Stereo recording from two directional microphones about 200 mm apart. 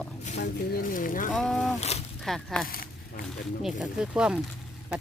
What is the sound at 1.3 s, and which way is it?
Speech, 5° left (ahead or behind).